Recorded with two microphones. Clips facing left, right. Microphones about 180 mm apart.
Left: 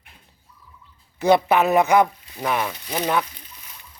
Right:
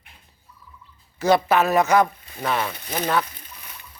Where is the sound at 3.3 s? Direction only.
55° right (ahead or behind).